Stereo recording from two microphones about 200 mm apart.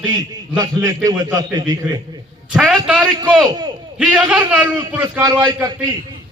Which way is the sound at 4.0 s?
5° right (ahead or behind).